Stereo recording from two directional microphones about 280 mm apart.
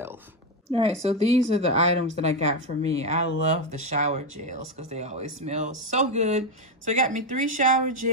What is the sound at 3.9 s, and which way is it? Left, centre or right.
Speech, right.